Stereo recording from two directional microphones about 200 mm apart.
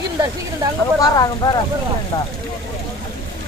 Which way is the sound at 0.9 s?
20° left (ahead or behind).